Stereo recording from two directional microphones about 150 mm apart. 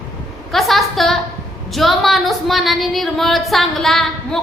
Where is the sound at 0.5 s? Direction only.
Centre (ahead or behind).